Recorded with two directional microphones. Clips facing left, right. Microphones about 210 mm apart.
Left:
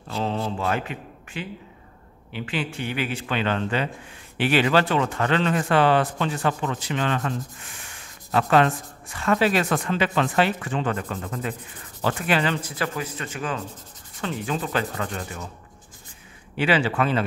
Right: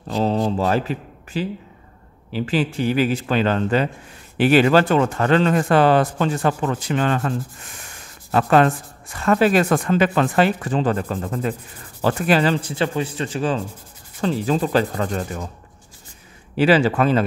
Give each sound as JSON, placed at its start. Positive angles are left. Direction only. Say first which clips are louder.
{"t": 0.1, "sound": "a man's voice", "louder": "right 7 dB", "side_deg": -35}
{"t": 16.5, "sound": "a man's voice", "louder": "right 6 dB", "side_deg": -40}